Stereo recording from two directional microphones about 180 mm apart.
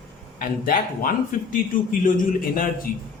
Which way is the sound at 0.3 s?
50° left (ahead or behind).